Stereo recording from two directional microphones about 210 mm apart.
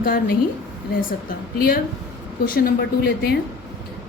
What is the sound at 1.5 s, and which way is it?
Speech, 45° left (ahead or behind).